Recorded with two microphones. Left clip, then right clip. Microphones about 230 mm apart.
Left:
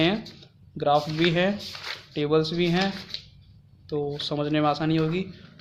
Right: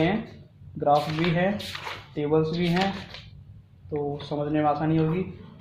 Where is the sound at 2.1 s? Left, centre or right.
Left.